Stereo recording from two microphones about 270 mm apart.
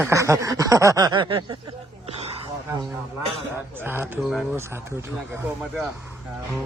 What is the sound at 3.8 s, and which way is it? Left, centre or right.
Speech, centre.